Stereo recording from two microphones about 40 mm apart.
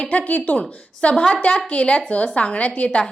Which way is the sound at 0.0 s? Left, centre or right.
Left.